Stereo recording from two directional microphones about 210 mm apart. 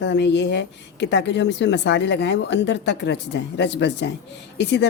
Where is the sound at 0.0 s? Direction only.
55° left (ahead or behind).